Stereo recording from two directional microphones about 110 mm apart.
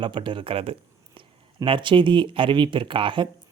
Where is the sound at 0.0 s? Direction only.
50° right (ahead or behind).